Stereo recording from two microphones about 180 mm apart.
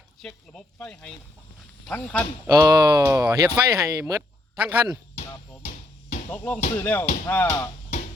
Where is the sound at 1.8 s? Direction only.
5° left (ahead or behind).